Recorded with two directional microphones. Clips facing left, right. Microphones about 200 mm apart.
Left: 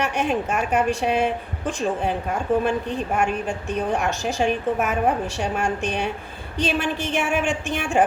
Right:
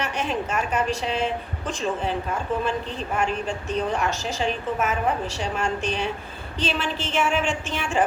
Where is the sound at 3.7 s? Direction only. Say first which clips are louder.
Left 1 dB; 55° left (ahead or behind).